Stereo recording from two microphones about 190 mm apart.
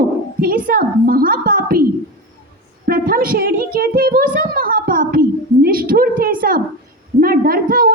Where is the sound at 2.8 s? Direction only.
50° right (ahead or behind).